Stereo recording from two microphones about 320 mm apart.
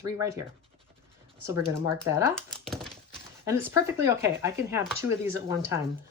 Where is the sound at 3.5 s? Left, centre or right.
Centre.